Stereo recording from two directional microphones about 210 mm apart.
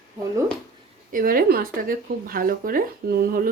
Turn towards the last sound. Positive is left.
turn(degrees=-45)  # may be behind; listen again after turning